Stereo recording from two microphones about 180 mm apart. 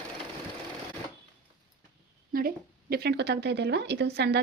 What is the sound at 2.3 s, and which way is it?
A woman's voice, 55° right (ahead or behind).